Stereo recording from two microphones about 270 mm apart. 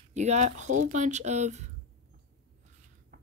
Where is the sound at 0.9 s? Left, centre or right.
Right.